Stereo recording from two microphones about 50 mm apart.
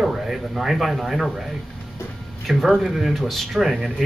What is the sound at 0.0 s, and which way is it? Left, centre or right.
Speech, centre.